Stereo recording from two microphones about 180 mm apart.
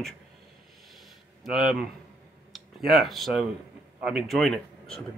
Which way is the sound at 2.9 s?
Centre (ahead or behind).